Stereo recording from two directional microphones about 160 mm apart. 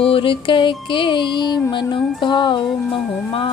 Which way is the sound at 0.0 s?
35° left (ahead or behind).